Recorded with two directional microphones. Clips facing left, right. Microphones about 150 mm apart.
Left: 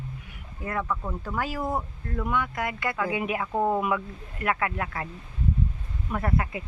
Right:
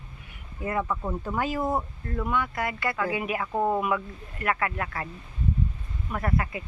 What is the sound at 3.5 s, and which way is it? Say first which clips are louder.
Speech: even; centre (ahead or behind).